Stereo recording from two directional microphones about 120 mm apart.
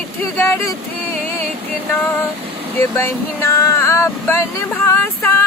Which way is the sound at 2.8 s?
20° left (ahead or behind).